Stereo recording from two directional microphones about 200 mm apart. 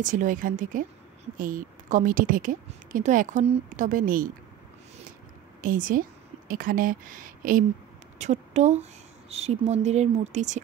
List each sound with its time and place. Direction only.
0.0 s a woman's voice: 40° right (ahead or behind)
5.6 s a woman's voice: 45° right (ahead or behind)